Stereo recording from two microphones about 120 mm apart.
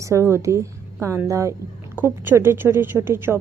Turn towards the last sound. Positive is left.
turn(degrees=-20)  # may be behind; listen again after turning